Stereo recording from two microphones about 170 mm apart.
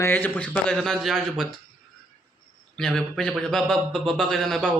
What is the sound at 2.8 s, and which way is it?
Speech, 5° left (ahead or behind).